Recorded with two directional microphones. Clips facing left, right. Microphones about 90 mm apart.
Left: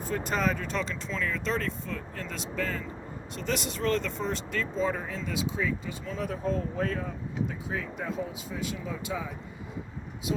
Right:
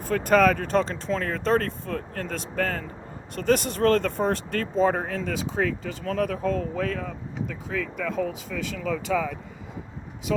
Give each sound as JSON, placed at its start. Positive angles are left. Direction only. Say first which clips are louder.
{"t": 0.0, "sound": "speech", "louder": "right 9 dB", "side_deg": -55}